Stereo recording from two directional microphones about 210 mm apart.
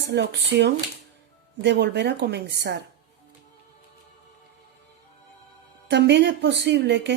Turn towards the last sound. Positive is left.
turn(degrees=-55)  # may be behind; listen again after turning